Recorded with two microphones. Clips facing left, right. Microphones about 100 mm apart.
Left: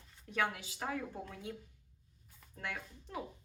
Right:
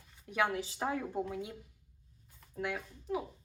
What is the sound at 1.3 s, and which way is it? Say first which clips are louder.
Speech: right 5 dB; 10° right (ahead or behind).